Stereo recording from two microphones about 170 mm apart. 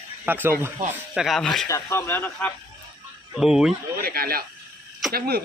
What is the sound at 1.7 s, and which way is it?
Speech, 15° left (ahead or behind).